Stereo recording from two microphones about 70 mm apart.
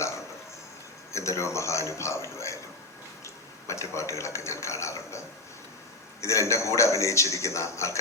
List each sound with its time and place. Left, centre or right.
1.1 s a man's voice: left
6.2 s a man's voice: left